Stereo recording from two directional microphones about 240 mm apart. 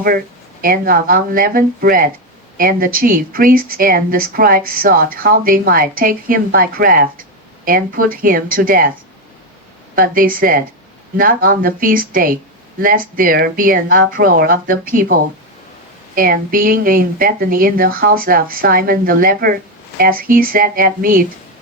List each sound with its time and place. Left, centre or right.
0.6 s a woman's voice: right
9.9 s a woman's voice: right